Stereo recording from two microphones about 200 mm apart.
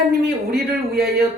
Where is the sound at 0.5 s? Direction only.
50° right (ahead or behind).